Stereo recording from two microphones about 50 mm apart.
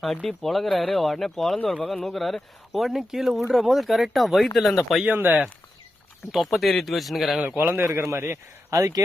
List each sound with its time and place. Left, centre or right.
0.3 s speech: centre
5.0 s speech: right
6.3 s speech: centre
7.4 s speech: right
7.7 s a man's voice: right
8.7 s speech: right